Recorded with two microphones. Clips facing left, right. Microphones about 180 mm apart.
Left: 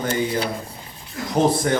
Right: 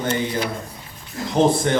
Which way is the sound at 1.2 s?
25° right (ahead or behind).